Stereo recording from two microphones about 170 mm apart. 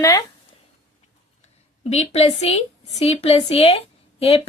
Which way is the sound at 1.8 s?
40° left (ahead or behind).